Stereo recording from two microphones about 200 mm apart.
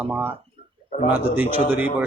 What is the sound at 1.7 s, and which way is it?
Speech, 10° right (ahead or behind).